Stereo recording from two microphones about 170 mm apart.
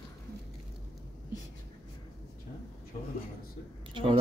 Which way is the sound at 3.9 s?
30° right (ahead or behind).